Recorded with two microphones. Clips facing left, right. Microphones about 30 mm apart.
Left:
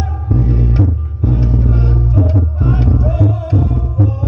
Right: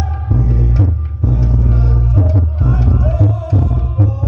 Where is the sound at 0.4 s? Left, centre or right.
Left.